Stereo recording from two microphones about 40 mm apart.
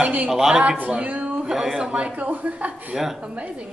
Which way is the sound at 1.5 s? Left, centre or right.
Centre.